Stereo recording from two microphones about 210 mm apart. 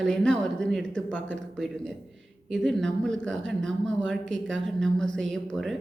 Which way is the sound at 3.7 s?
65° right (ahead or behind).